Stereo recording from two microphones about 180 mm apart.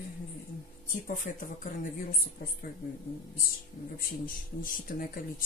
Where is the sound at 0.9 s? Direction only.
50° left (ahead or behind).